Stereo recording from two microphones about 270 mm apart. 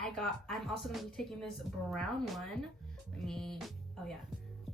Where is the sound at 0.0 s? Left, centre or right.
Centre.